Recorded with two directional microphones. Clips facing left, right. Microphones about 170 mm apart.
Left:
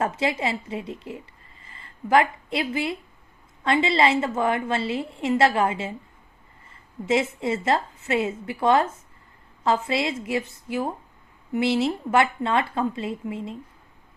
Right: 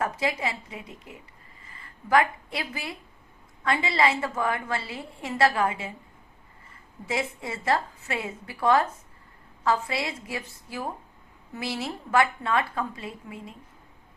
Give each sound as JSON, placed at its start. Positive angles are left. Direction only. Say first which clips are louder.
{"t": 0.0, "sound": "a woman's voice", "louder": "left 3 dB", "side_deg": 25}
{"t": 7.0, "sound": "a woman's voice", "louder": "left 7 dB", "side_deg": 25}